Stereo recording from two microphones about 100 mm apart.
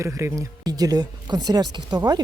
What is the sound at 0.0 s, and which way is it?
Speech, 30° right (ahead or behind).